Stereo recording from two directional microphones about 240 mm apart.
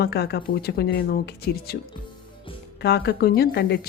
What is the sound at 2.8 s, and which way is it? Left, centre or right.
Speech, left.